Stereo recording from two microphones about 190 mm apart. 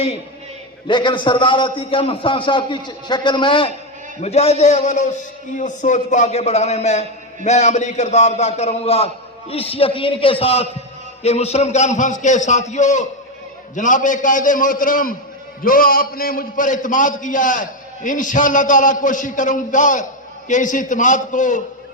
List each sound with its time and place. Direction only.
0.9 s a man's voice: 25° left (ahead or behind); by 21.6 s 40° left (ahead or behind)